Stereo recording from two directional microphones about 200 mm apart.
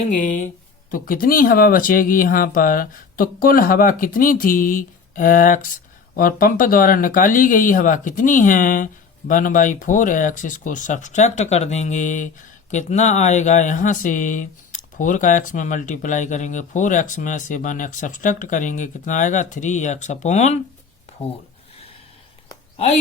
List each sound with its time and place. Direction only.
0.1 s speech: 40° left (ahead or behind)